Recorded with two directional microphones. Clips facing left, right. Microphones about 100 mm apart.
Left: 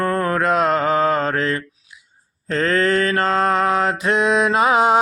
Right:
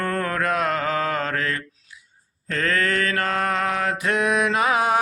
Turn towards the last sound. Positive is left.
turn(degrees=20)  # may be behind; listen again after turning